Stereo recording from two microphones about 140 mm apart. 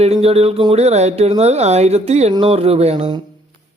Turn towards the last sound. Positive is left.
turn(degrees=-50)  # may be behind; listen again after turning